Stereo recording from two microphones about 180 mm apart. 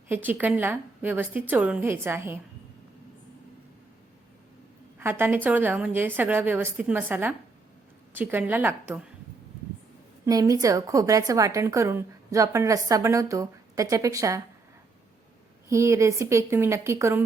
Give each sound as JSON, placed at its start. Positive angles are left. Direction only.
{"t": 0.1, "sound": "a woman's voice", "side_deg": -10}
{"t": 4.9, "sound": "a woman's voice", "side_deg": -10}
{"t": 10.2, "sound": "a woman's voice", "side_deg": -20}
{"t": 15.7, "sound": "a woman's voice", "side_deg": -15}